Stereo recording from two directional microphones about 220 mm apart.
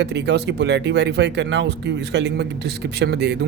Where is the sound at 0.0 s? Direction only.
50° right (ahead or behind).